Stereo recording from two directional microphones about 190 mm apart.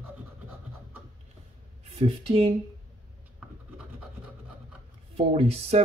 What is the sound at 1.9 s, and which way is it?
Speech, 30° right (ahead or behind).